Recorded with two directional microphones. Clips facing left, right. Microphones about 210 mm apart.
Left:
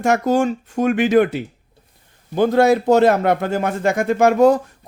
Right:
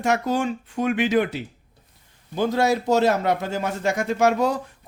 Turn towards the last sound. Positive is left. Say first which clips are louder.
# left 7 dB
turn(degrees=50)  # may be behind; listen again after turning